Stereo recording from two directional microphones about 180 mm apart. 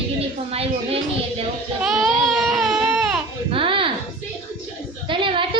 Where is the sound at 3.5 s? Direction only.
30° right (ahead or behind).